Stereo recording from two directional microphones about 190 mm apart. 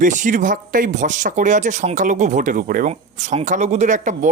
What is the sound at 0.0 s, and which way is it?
Speech, 40° right (ahead or behind).